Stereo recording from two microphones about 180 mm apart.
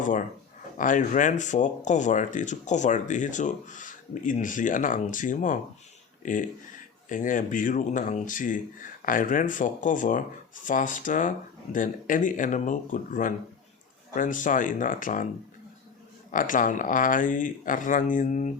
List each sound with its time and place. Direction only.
0.0 s speech: 45° left (ahead or behind)
16.3 s speech: 45° left (ahead or behind)